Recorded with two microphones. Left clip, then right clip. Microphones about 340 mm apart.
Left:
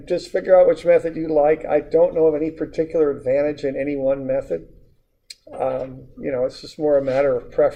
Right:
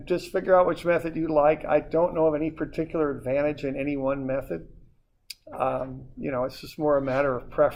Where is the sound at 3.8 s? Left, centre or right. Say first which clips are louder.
Left 6 dB; right.